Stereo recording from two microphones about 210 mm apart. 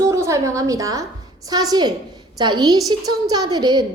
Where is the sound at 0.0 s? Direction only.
15° right (ahead or behind).